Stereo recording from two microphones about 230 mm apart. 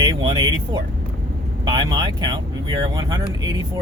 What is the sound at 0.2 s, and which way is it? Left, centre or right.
Speech, centre.